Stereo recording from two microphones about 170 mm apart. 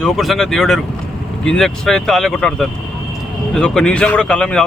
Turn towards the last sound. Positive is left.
turn(degrees=5)  # may be behind; listen again after turning